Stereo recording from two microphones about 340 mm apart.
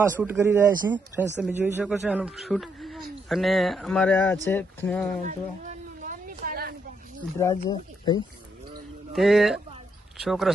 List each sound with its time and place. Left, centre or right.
0.2 s speech: centre
5.2 s a sound: right
7.3 s speech: centre
9.1 s speech: centre